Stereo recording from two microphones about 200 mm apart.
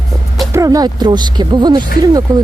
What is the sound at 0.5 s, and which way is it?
Speech, 15° right (ahead or behind).